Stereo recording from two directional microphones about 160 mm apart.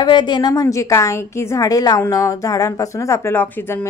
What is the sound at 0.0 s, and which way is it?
A woman's voice, 30° left (ahead or behind).